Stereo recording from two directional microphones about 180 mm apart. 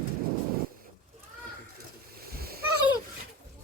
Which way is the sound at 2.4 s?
60° right (ahead or behind).